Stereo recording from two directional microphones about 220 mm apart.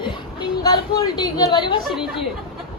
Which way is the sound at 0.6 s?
20° left (ahead or behind).